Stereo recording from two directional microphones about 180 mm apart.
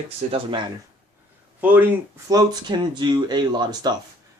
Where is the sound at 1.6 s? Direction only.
10° right (ahead or behind).